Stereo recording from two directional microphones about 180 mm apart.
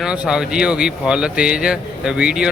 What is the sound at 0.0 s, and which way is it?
Speech, 5° right (ahead or behind).